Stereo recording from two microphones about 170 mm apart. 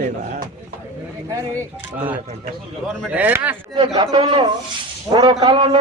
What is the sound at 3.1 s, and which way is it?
Speech, 10° right (ahead or behind).